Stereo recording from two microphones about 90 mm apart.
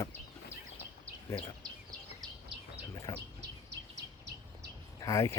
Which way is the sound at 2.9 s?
40° left (ahead or behind).